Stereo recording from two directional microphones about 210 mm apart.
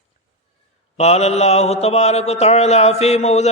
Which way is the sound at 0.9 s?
30° left (ahead or behind).